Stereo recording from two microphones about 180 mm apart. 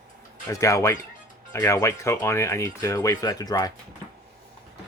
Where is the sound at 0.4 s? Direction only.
15° left (ahead or behind).